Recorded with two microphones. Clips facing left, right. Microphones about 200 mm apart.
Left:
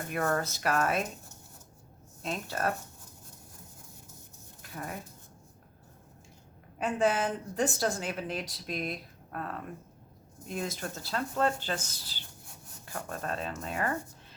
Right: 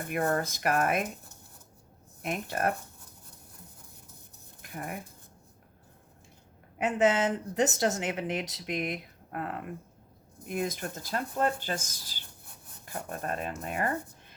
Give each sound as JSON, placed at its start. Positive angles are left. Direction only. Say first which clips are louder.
{"t": 0.3, "sound": "speech", "louder": "right 1 dB", "side_deg": -15}
{"t": 2.2, "sound": "speech", "louder": "right 2 dB", "side_deg": -15}
{"t": 4.6, "sound": "speech", "louder": "right 1 dB", "side_deg": -15}
{"t": 6.7, "sound": "a woman's voice", "louder": "right 3 dB", "side_deg": -20}